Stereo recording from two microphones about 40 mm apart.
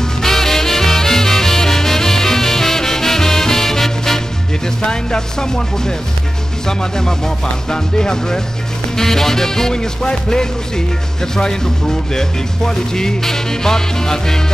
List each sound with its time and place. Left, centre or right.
0.2 s music: centre
4.8 s speech: centre